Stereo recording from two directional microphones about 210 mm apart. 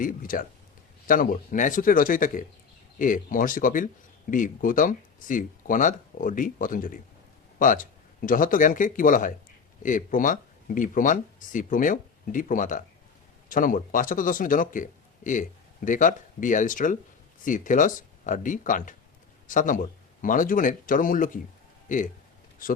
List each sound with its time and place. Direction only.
0.0 s speech: 40° left (ahead or behind)